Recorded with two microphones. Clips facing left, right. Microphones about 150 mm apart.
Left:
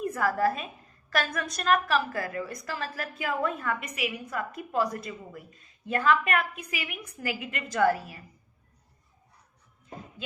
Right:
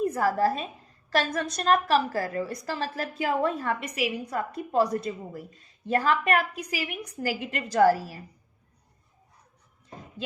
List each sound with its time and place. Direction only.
0.0 s a woman's voice: 30° right (ahead or behind)